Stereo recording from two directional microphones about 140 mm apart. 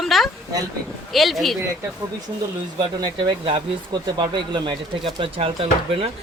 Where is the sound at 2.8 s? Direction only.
35° right (ahead or behind).